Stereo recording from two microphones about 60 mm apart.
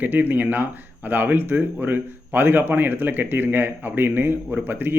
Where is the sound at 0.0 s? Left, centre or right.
Right.